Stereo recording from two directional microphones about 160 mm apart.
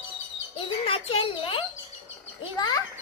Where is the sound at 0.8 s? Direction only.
35° left (ahead or behind).